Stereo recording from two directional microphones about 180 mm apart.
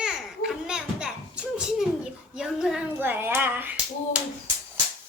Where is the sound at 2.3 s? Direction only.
5° right (ahead or behind).